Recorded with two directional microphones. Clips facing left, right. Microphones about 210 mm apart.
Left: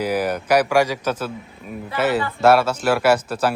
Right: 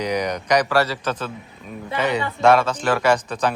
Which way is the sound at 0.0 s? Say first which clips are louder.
Left 2 dB; 5° left (ahead or behind).